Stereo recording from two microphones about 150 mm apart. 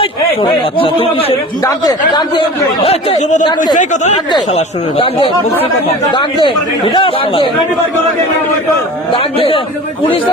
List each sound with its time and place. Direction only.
0.8 s speech: 35° left (ahead or behind)
1.6 s speech: 25° left (ahead or behind)
2.8 s speech: 40° left (ahead or behind)
4.5 s speech: 40° left (ahead or behind)
9.1 s speech: 35° left (ahead or behind)